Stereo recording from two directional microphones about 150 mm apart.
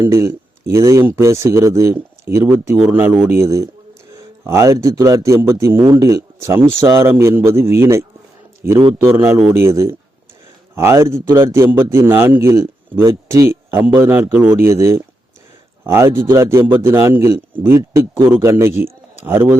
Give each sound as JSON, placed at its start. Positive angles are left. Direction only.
{"t": 0.0, "sound": "a man's voice", "side_deg": -20}